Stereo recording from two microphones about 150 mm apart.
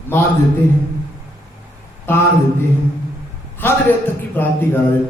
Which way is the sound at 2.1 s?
15° left (ahead or behind).